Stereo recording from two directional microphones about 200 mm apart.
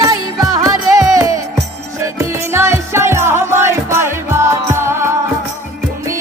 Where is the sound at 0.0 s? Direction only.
20° right (ahead or behind).